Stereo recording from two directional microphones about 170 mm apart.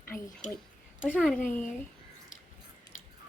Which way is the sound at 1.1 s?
5° left (ahead or behind).